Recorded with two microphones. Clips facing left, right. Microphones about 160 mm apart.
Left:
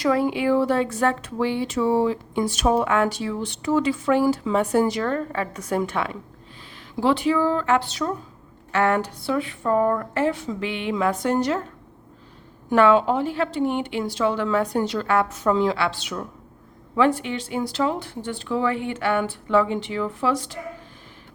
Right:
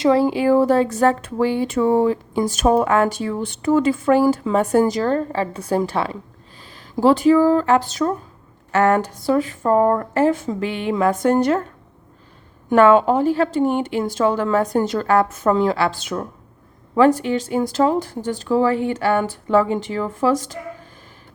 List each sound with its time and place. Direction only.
0.0 s speech: 30° right (ahead or behind); by 11.6 s 50° right (ahead or behind)
12.7 s speech: 50° right (ahead or behind)